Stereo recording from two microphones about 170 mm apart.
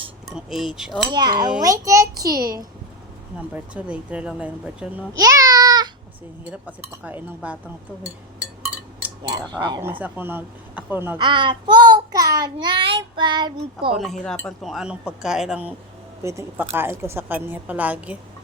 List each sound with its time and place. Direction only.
0.3 s speech: centre (ahead or behind)
1.1 s child singing: 25° right (ahead or behind)
3.5 s a woman's voice: 10° right (ahead or behind)
5.1 s a sound: 20° right (ahead or behind)
6.4 s a woman's voice: 10° right (ahead or behind)
9.5 s child singing: 25° right (ahead or behind)
10.0 s a woman's voice: 10° right (ahead or behind)
11.2 s child singing: 30° right (ahead or behind)
13.9 s speech: centre (ahead or behind)
16.2 s a woman's voice: 15° right (ahead or behind)